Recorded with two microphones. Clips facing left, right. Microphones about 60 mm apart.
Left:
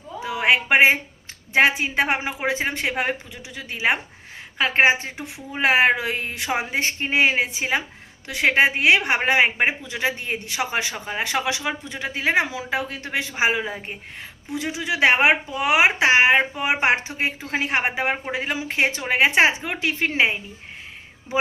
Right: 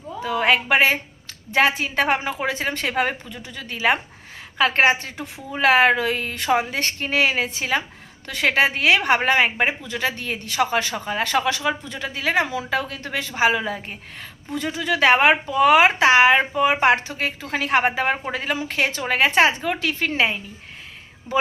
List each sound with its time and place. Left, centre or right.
0.4 s a woman's voice: left